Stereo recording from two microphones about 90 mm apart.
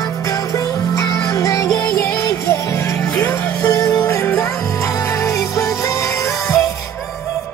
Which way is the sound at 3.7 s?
35° left (ahead or behind).